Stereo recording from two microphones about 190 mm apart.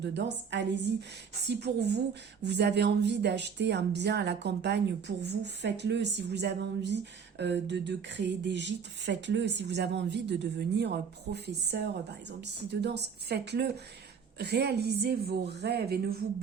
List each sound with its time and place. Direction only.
0.0 s a woman's voice: 65° right (ahead or behind)